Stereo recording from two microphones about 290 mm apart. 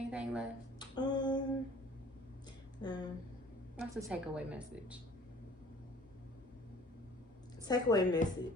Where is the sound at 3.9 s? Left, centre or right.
Centre.